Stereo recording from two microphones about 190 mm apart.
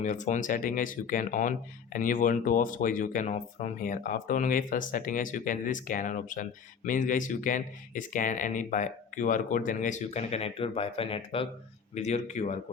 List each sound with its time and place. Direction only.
0.0 s speech: 40° left (ahead or behind)